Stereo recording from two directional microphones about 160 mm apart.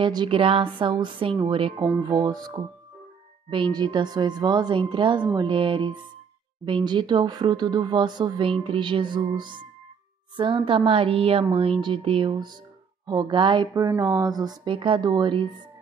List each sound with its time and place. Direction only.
0.0 s speech: 30° right (ahead or behind)